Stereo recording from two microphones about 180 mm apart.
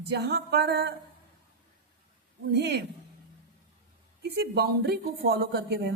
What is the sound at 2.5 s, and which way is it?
Speech, 75° right (ahead or behind).